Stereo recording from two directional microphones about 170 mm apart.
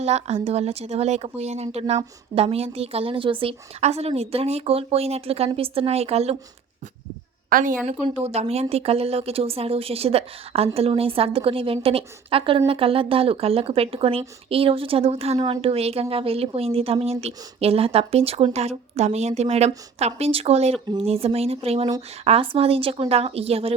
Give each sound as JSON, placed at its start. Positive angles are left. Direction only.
{"t": 0.0, "sound": "a woman's voice", "side_deg": -40}
{"t": 7.5, "sound": "a woman's voice", "side_deg": -50}
{"t": 7.9, "sound": "a woman's voice", "side_deg": -40}